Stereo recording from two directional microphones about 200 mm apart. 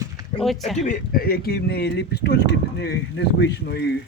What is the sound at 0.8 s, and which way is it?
Speech, 45° left (ahead or behind).